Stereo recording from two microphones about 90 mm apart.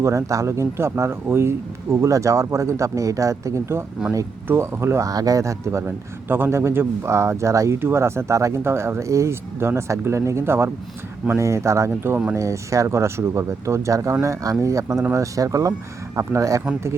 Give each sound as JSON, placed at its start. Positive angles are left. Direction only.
{"t": 0.0, "sound": "speech", "side_deg": -35}
{"t": 6.2, "sound": "speech", "side_deg": -25}